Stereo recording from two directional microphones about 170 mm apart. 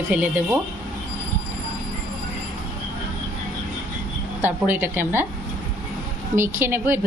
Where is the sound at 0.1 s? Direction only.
10° right (ahead or behind).